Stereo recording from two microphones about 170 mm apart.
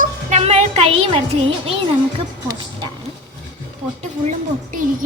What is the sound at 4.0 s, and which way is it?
Speech, 45° right (ahead or behind).